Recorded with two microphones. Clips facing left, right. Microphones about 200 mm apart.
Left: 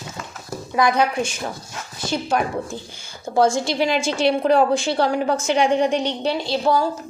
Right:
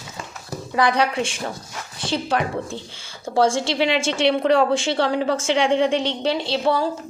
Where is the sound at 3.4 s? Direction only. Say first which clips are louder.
Left 1 dB; 30° right (ahead or behind).